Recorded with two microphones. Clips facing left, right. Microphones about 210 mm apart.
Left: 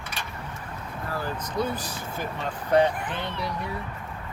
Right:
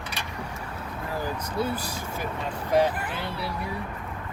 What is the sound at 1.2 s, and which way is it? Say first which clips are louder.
Speech: even; 10° right (ahead or behind).